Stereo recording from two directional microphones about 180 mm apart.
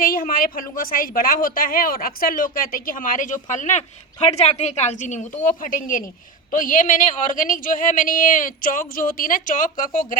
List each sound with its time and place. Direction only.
0.0 s a woman's voice: 50° left (ahead or behind)